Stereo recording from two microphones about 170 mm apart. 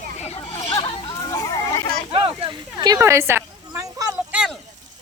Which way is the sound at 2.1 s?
30° right (ahead or behind).